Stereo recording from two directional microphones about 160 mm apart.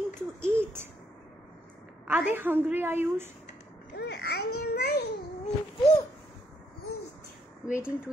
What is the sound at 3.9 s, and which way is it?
Speech, 90° left.